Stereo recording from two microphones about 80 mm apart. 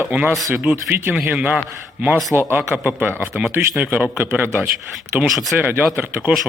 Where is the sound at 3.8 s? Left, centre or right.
Centre.